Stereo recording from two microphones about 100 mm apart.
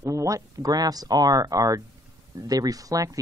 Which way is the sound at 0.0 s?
30° right (ahead or behind).